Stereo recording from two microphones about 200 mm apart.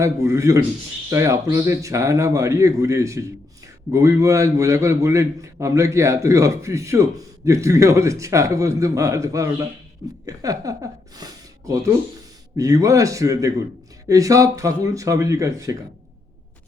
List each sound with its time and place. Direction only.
0.0 s a man's voice: 15° right (ahead or behind)
11.2 s a sound: 15° right (ahead or behind)
12.5 s a man's voice: 15° right (ahead or behind)